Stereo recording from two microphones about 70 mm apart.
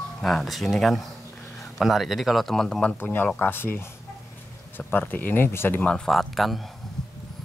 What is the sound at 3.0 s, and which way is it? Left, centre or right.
Speech, left.